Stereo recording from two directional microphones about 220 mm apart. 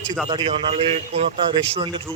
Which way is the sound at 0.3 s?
20° right (ahead or behind).